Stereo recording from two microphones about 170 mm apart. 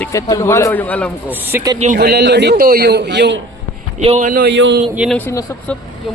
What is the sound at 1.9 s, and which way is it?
A man's voice, 70° right (ahead or behind).